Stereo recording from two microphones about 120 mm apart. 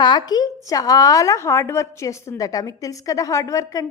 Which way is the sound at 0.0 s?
35° left (ahead or behind).